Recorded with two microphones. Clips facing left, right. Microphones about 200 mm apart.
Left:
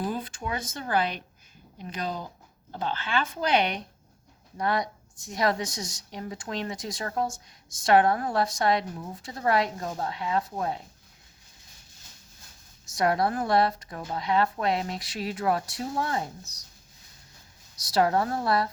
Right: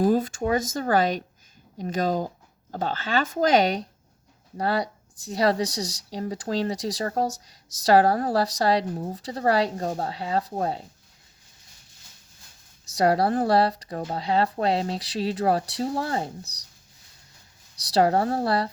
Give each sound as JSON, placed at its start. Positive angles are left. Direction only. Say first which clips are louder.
{"t": 0.0, "sound": "a woman's voice", "louder": "right 10 dB", "side_deg": -45}
{"t": 13.0, "sound": "a woman's voice", "louder": "right 4 dB", "side_deg": -35}
{"t": 17.8, "sound": "a woman's voice", "louder": "right 3 dB", "side_deg": -30}